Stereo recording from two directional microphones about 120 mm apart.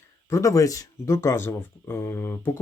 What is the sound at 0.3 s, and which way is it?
Speech, 25° left (ahead or behind).